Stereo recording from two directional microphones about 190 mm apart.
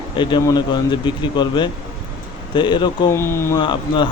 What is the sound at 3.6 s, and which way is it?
Speech, 25° left (ahead or behind).